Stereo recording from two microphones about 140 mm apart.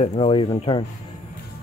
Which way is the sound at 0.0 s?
40° left (ahead or behind).